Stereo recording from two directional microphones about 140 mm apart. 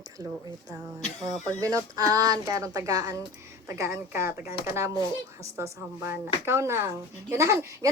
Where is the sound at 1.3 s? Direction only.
25° right (ahead or behind).